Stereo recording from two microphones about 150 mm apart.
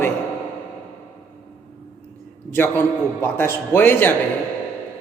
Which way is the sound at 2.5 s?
15° left (ahead or behind).